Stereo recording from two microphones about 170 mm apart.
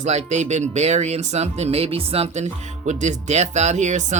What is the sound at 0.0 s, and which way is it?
A woman's voice, 40° right (ahead or behind).